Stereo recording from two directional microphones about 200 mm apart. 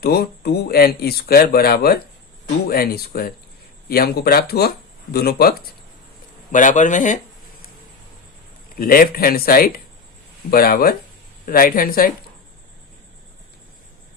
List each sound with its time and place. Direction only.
0.0 s speech: 50° left (ahead or behind)
6.5 s speech: 40° left (ahead or behind)
8.7 s speech: 45° left (ahead or behind)